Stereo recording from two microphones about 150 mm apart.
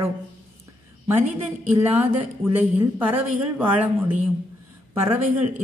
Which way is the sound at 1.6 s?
10° right (ahead or behind).